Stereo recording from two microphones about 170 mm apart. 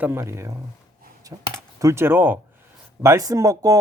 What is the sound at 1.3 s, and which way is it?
Speech, 40° right (ahead or behind).